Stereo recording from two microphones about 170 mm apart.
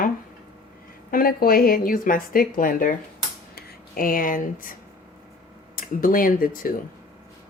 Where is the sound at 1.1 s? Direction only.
60° left (ahead or behind).